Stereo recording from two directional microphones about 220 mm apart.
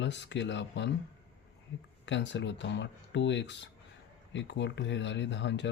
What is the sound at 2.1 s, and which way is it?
Speech, 55° left (ahead or behind).